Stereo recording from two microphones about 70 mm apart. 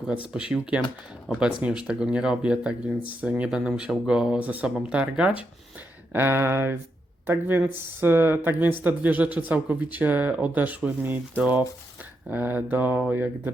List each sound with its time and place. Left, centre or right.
0.1 s speech: centre
4.4 s speech: right
6.1 s speech: right